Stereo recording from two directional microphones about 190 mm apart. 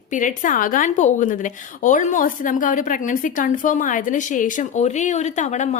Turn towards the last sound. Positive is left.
turn(degrees=40)  # may be behind; listen again after turning